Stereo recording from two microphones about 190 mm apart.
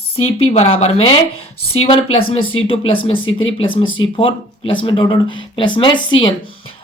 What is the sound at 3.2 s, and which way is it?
Speech, 90° left.